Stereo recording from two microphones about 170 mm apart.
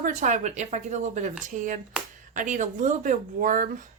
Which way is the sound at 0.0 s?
45° right (ahead or behind).